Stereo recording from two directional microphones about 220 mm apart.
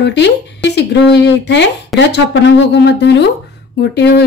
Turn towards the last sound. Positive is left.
turn(degrees=50)  # may be behind; listen again after turning